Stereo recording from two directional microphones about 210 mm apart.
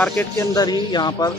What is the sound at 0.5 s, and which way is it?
Speech, 20° left (ahead or behind).